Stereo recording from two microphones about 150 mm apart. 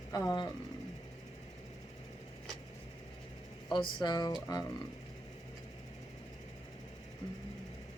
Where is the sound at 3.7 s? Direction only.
30° left (ahead or behind).